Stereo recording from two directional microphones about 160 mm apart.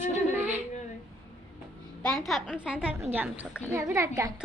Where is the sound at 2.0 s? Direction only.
Centre (ahead or behind); by 4.1 s 15° right (ahead or behind).